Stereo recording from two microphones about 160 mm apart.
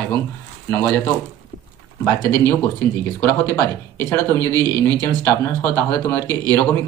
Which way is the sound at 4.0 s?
15° left (ahead or behind).